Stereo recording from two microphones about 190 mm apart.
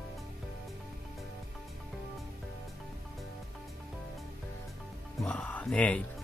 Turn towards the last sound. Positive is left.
turn(degrees=5)  # may be behind; listen again after turning